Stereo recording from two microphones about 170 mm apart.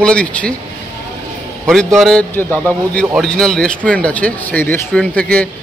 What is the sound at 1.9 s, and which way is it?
Speech, 5° left (ahead or behind).